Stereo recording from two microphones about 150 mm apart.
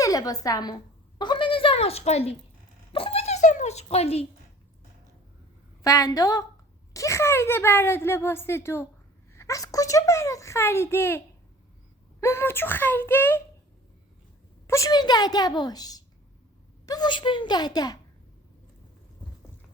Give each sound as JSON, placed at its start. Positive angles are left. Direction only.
{"t": 0.0, "sound": "a woman's voice", "side_deg": 25}
{"t": 1.2, "sound": "a sound", "side_deg": 30}
{"t": 5.8, "sound": "a child's voice", "side_deg": 25}
{"t": 12.2, "sound": "speech", "side_deg": 15}
{"t": 14.7, "sound": "a child's voice", "side_deg": 25}